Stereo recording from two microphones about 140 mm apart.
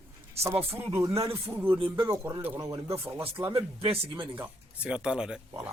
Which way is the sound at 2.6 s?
30° right (ahead or behind).